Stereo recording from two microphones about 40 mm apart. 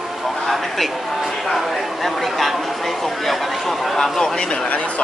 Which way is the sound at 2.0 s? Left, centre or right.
Centre.